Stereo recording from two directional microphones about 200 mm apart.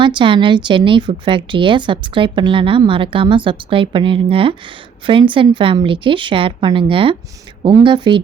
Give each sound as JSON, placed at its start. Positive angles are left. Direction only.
{"t": 0.0, "sound": "speech", "side_deg": -25}